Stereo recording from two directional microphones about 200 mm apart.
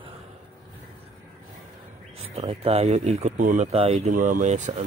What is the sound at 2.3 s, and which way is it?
Speech, 30° right (ahead or behind).